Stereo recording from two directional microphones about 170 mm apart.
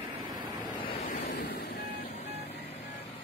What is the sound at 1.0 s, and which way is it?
Waves, 50° left (ahead or behind).